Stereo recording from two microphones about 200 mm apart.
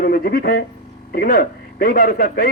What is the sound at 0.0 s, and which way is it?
A man's voice, 45° left (ahead or behind).